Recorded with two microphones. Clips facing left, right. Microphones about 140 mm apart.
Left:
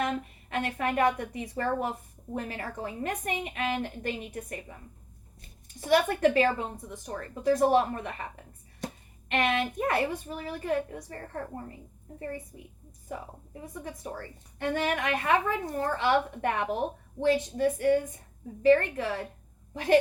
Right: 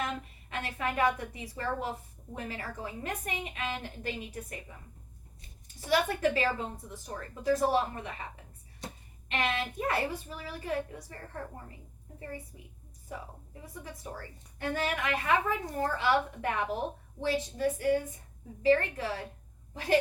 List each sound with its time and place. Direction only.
0.0 s a woman's voice: 50° left (ahead or behind)
9.3 s a woman's voice: 50° left (ahead or behind)